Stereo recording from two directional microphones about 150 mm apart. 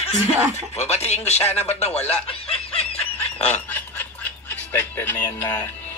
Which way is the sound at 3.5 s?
10° left (ahead or behind).